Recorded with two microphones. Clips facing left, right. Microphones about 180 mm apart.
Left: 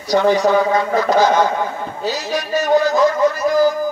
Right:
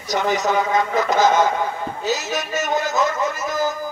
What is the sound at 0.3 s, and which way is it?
A man's voice, 20° right (ahead or behind).